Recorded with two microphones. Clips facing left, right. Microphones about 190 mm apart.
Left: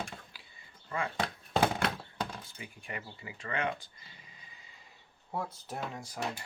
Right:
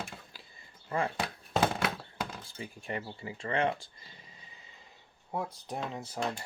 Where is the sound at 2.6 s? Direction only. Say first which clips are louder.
Right 9 dB; 35° right (ahead or behind).